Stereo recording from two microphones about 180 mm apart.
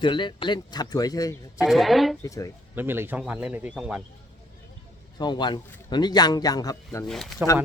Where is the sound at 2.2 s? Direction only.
20° left (ahead or behind).